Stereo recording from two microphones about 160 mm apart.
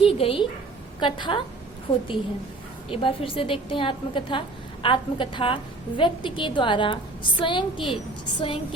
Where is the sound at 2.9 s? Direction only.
35° left (ahead or behind).